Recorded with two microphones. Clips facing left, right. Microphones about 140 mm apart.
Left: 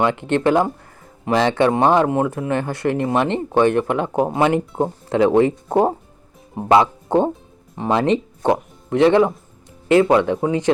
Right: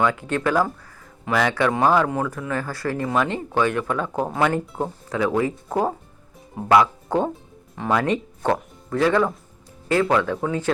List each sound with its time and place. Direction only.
0.0 s speech: 25° left (ahead or behind)